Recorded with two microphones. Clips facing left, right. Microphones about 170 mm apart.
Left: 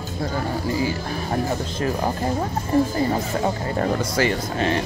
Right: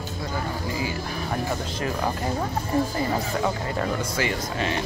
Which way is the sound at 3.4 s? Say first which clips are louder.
Left 3 dB; 40° left (ahead or behind).